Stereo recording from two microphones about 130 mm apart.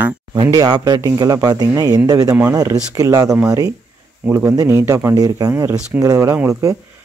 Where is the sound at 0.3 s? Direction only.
30° right (ahead or behind).